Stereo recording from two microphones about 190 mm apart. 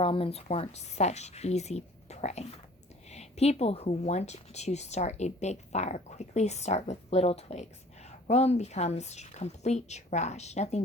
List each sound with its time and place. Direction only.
0.0 s speech: 30° left (ahead or behind)